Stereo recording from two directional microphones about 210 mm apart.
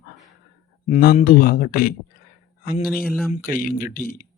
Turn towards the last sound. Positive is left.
turn(degrees=40)  # may be behind; listen again after turning